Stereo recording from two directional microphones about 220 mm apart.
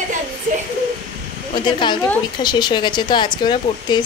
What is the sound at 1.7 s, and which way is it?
Speech, 20° left (ahead or behind).